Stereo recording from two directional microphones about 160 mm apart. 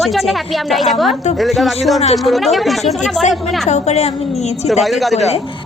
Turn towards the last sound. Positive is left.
turn(degrees=0)  # may be behind; listen again after turning